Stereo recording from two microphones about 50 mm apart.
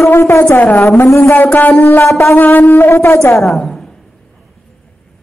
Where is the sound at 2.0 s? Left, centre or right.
Left.